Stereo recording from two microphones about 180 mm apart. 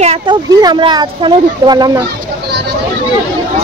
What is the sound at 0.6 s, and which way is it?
Speech, 25° right (ahead or behind).